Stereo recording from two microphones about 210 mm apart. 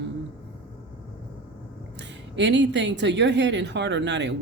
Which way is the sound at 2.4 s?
55° right (ahead or behind).